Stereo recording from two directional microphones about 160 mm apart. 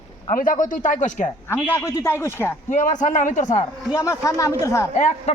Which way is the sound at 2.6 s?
50° left (ahead or behind).